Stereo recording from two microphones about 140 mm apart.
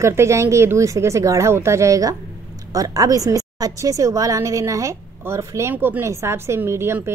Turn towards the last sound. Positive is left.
turn(degrees=-15)  # may be behind; listen again after turning